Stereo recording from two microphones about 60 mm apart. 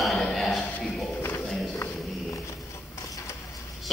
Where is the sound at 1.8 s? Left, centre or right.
Left.